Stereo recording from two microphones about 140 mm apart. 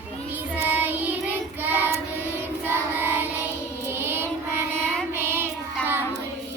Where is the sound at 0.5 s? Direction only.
15° right (ahead or behind).